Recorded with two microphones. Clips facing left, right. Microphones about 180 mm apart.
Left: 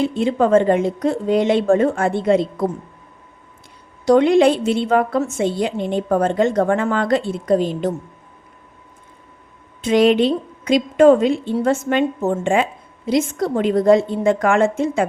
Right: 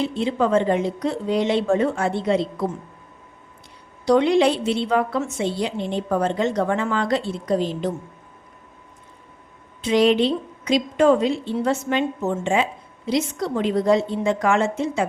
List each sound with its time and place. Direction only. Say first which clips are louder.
0.0 s a woman's voice: left 4 dB; 50° left (ahead or behind)
4.0 s a woman's voice: left 4 dB; 50° left (ahead or behind)
9.8 s a woman's voice: left 3 dB; 55° left (ahead or behind)